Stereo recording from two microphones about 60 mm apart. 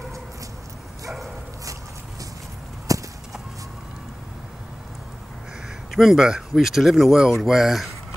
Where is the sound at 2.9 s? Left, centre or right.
Right.